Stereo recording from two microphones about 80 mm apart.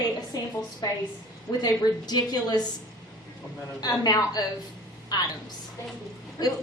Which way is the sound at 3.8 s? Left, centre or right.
Left.